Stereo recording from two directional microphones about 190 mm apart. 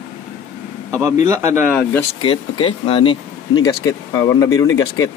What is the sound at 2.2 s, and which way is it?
Speech, 30° left (ahead or behind).